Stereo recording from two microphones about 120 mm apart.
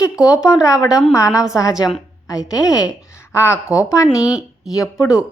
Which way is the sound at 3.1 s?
20° left (ahead or behind).